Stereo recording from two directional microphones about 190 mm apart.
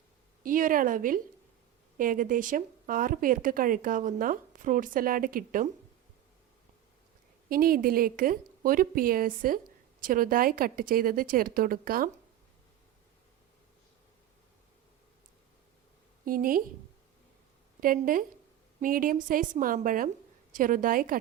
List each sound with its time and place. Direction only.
0.4 s a woman's voice: 45° right (ahead or behind)
7.5 s a woman's voice: 50° right (ahead or behind)
16.2 s a woman's voice: 50° right (ahead or behind)
17.7 s a woman's voice: 45° right (ahead or behind)